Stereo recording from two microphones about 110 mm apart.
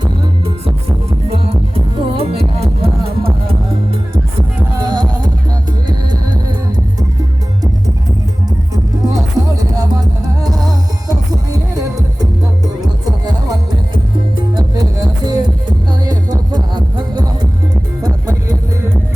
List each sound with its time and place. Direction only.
1.3 s music: 60° right (ahead or behind)
4.7 s music: 40° right (ahead or behind)
8.7 s music: 35° right (ahead or behind)